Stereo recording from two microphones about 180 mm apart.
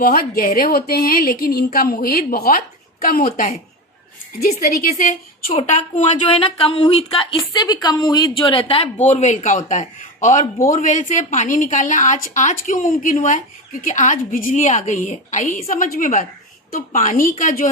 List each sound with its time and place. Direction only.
0.0 s a woman's voice: 55° left (ahead or behind)